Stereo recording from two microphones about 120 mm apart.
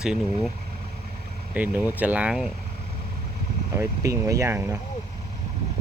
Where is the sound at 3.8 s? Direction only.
25° right (ahead or behind).